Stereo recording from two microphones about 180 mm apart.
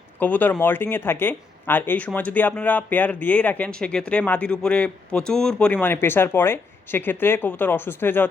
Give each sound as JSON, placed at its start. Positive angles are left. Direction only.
{"t": 0.2, "sound": "speech", "side_deg": 10}